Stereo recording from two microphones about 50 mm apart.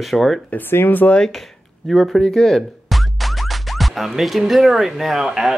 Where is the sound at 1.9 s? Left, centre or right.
Centre.